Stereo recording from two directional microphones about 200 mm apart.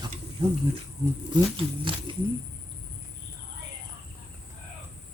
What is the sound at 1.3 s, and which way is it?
Speech, 25° right (ahead or behind).